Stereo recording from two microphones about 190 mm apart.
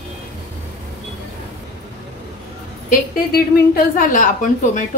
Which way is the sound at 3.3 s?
45° left (ahead or behind).